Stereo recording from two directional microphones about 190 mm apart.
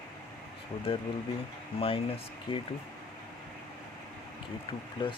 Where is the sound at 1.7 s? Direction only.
30° left (ahead or behind).